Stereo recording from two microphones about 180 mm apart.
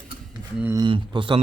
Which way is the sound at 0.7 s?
25° right (ahead or behind).